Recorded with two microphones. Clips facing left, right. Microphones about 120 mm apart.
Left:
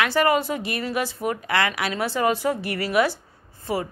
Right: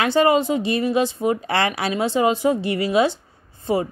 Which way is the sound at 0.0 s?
25° right (ahead or behind).